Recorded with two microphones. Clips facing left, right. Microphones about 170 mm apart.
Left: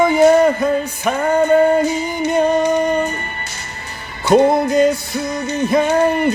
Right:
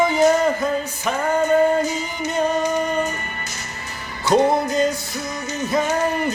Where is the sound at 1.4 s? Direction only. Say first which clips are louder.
Left 4 dB; 30° left (ahead or behind).